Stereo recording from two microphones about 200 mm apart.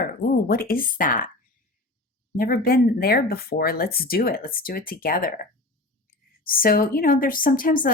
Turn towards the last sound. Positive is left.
turn(degrees=40)  # may be behind; listen again after turning